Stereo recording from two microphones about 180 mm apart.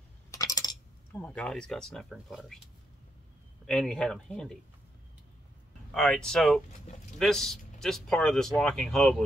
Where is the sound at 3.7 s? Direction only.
5° left (ahead or behind).